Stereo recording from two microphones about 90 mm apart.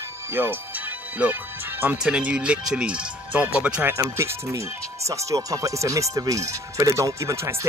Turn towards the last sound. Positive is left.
turn(degrees=-30)  # may be behind; listen again after turning